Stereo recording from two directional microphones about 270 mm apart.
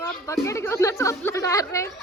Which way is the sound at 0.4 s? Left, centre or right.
Centre.